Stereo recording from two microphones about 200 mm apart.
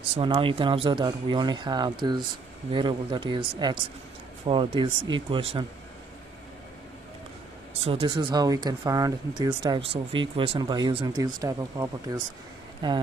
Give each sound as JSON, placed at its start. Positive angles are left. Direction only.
{"t": 0.2, "sound": "speech", "side_deg": -25}
{"t": 7.7, "sound": "speech", "side_deg": -30}